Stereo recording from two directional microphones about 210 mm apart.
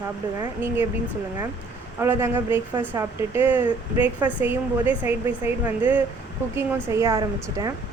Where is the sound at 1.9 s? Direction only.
10° right (ahead or behind).